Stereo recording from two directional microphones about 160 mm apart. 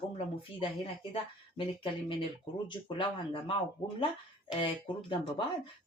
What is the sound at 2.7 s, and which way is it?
Speech, 30° left (ahead or behind).